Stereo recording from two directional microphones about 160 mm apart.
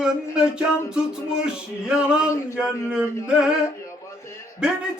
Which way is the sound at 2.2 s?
15° left (ahead or behind).